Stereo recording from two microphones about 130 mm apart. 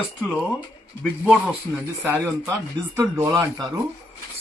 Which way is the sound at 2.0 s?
10° right (ahead or behind).